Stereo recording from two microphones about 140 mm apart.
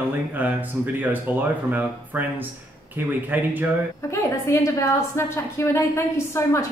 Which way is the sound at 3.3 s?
15° right (ahead or behind).